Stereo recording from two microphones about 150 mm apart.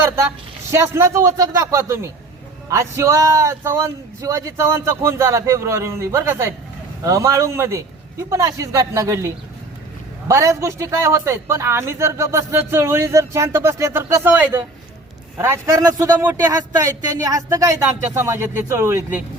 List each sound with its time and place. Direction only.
0.3 s a man's voice: 15° right (ahead or behind)